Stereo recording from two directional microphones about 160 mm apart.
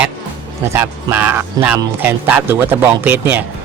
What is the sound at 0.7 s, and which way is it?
A man's voice, 15° right (ahead or behind).